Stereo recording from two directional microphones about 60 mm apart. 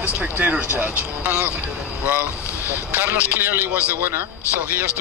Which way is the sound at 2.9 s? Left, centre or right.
Right.